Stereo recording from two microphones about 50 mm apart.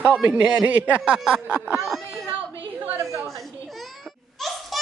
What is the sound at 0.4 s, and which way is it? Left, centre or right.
Speech, right.